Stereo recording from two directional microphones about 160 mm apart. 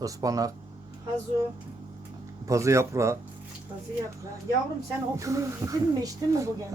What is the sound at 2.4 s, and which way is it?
Speech, 20° right (ahead or behind).